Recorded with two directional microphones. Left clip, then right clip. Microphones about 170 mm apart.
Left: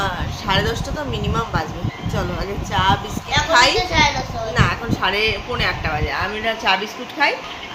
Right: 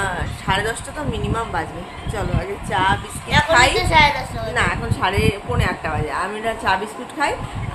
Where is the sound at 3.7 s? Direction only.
75° right (ahead or behind).